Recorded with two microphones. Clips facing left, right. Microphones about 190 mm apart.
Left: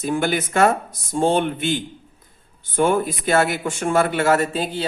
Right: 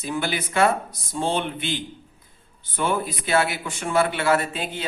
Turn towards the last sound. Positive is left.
turn(degrees=35)  # may be behind; listen again after turning